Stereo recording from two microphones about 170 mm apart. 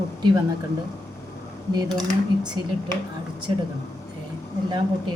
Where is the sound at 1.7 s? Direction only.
25° right (ahead or behind).